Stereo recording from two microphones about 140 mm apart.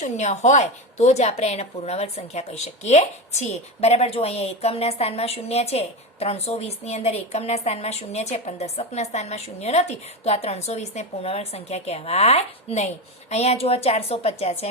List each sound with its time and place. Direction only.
0.0 s a woman's voice: 55° left (ahead or behind)